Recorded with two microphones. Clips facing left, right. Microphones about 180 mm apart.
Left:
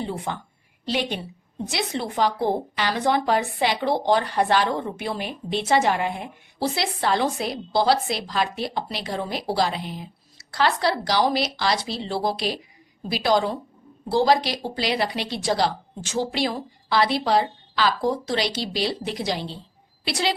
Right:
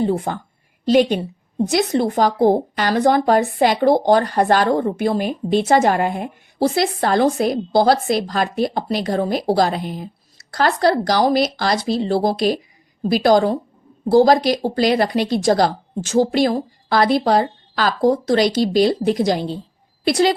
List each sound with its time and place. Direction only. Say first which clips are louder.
0.0 s a woman's voice: right 9 dB; 45° right (ahead or behind)